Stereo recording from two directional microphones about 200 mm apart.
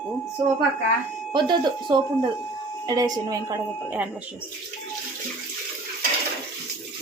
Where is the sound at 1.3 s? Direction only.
25° right (ahead or behind).